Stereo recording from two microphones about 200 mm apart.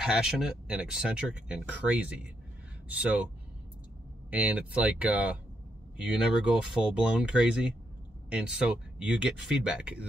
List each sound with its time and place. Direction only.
0.0 s speech: 5° right (ahead or behind)
4.3 s speech: 5° right (ahead or behind)